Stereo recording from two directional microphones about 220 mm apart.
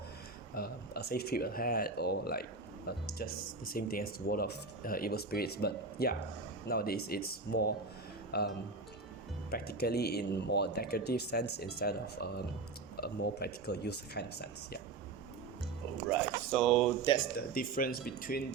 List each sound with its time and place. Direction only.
0.5 s speech: 45° left (ahead or behind)
16.5 s speech: centre (ahead or behind)
17.3 s speech: 40° left (ahead or behind)